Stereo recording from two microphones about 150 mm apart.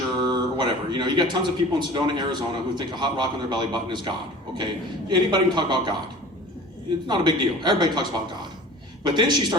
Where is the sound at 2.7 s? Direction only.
30° right (ahead or behind).